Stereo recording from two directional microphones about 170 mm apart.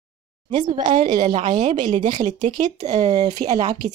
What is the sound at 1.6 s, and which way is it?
Speech, 45° right (ahead or behind).